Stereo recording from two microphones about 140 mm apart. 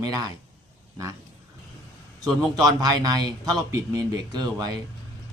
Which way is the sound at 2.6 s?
30° right (ahead or behind).